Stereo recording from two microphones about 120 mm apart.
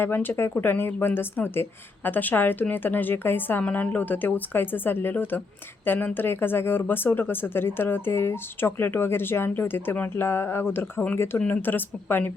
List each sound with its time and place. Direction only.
0.0 s speech: 15° left (ahead or behind)